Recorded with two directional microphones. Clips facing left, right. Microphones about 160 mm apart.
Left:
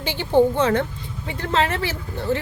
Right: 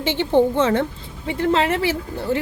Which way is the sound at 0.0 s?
25° right (ahead or behind).